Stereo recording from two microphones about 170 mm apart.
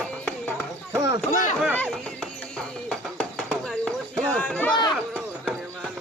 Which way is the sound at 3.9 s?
5° left (ahead or behind).